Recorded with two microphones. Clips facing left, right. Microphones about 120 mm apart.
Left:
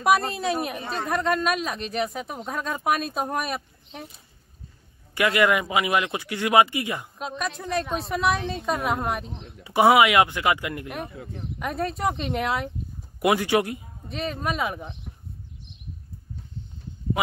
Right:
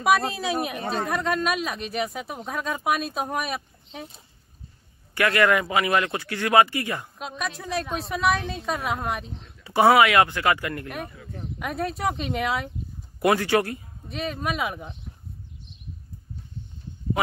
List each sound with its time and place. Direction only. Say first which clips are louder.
0.0 s speech: left 1 dB; centre (ahead or behind)
5.1 s a man's voice: even; 20° left (ahead or behind)
7.2 s speech: left 2 dB; centre (ahead or behind)
9.6 s a man's voice: even; 15° left (ahead or behind)
11.6 s speech: left 1 dB; centre (ahead or behind)
13.2 s a man's voice: even; 15° left (ahead or behind)
14.0 s speech: even; centre (ahead or behind)